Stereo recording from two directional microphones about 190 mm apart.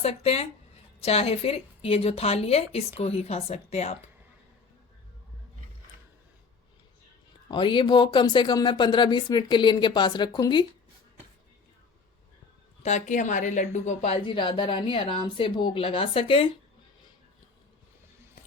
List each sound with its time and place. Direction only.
0.0 s a woman's voice: 30° left (ahead or behind)
7.4 s speech: 25° left (ahead or behind)
12.8 s a woman's voice: 40° left (ahead or behind)